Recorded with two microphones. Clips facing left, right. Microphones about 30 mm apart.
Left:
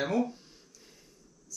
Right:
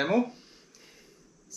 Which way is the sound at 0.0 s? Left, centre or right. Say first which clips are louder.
Right 3 dB; right.